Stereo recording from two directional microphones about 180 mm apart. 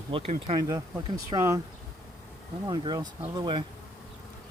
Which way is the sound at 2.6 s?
25° right (ahead or behind).